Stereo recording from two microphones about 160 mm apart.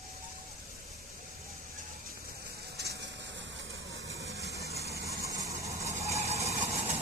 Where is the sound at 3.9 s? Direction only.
20° right (ahead or behind).